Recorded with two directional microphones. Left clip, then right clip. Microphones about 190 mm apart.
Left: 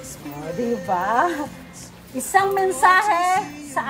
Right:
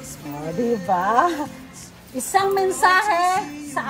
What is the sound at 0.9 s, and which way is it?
A woman's voice, 15° right (ahead or behind).